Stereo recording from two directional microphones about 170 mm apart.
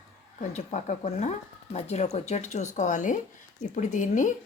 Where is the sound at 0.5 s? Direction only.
45° left (ahead or behind).